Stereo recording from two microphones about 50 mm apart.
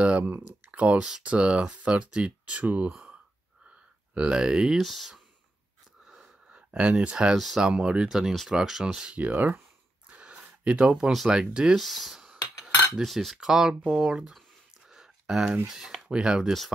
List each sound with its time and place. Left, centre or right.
0.0 s speech: right
4.1 s speech: centre
4.7 s cutlery: centre
6.5 s speech: centre
7.3 s cutlery: centre
7.6 s speech: centre
9.1 s speech: right
10.1 s a sound: right
11.2 s speech: centre
11.8 s cutlery: centre
13.5 s speech: centre
14.9 s a sound: centre
15.7 s speech: centre